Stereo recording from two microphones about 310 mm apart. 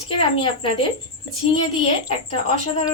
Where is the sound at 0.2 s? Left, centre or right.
Centre.